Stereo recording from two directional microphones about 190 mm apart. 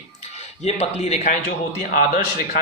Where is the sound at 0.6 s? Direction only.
35° left (ahead or behind).